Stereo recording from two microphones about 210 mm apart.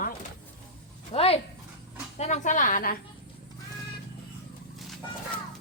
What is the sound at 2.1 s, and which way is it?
Speech, 30° left (ahead or behind).